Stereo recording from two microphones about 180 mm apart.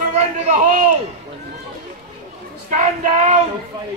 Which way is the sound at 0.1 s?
40° right (ahead or behind).